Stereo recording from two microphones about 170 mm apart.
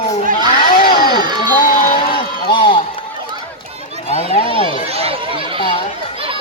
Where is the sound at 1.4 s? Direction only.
55° left (ahead or behind).